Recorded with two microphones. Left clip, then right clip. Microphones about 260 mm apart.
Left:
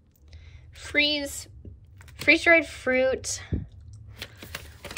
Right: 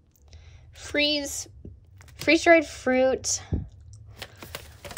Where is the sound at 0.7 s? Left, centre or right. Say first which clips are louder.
Left 1 dB; centre.